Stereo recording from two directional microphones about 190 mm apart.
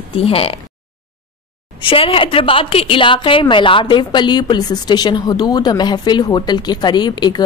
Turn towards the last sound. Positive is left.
turn(degrees=20)  # may be behind; listen again after turning